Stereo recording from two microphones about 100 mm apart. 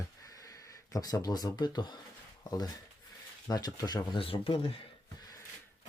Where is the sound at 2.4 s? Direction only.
40° left (ahead or behind).